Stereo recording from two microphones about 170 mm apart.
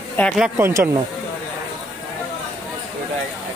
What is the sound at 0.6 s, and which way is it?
Speech, 15° right (ahead or behind).